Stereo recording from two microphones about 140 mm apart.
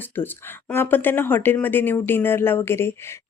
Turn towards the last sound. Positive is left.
turn(degrees=15)  # may be behind; listen again after turning